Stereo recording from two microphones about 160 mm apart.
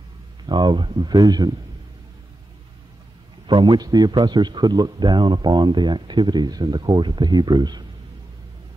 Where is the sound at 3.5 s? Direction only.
30° right (ahead or behind).